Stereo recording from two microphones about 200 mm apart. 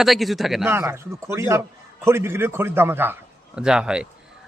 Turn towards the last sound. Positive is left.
turn(degrees=-5)  # may be behind; listen again after turning